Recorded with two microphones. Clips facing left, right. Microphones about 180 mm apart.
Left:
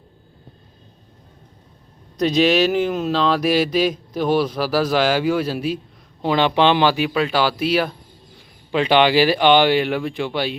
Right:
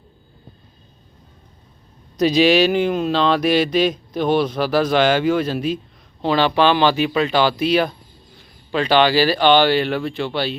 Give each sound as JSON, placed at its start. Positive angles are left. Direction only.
{"t": 2.1, "sound": "speech", "side_deg": 0}
{"t": 8.7, "sound": "speech", "side_deg": 15}